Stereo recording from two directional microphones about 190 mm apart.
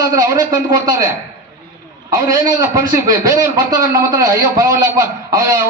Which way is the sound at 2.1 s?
15° right (ahead or behind).